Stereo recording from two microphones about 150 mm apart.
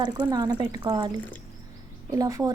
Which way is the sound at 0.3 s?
25° right (ahead or behind).